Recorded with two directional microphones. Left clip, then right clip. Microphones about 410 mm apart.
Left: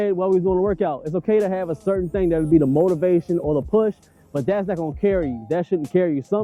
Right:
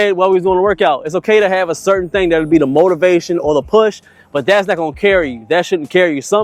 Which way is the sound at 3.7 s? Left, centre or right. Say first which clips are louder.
Right 8 dB; centre.